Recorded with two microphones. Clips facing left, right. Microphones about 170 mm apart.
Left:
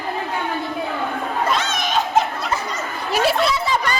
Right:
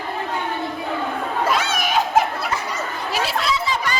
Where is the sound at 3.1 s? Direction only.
55° left (ahead or behind).